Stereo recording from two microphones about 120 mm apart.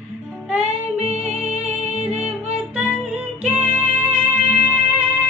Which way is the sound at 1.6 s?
10° right (ahead or behind).